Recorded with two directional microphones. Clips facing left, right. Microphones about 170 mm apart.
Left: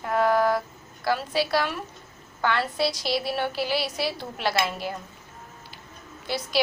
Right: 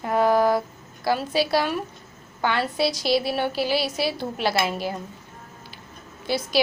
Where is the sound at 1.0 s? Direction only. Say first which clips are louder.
Right 2 dB; 30° right (ahead or behind).